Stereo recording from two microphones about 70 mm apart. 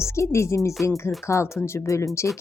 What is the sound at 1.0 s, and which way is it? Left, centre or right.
Music, left.